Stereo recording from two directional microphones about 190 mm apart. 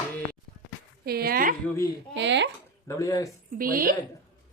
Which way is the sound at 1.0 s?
55° right (ahead or behind).